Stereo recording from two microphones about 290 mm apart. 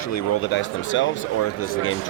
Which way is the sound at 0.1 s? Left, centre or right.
Left.